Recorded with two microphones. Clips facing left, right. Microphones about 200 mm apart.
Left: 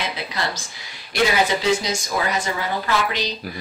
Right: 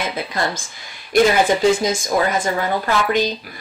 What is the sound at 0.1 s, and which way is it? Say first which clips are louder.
Speech: right 4 dB; 50° right (ahead or behind).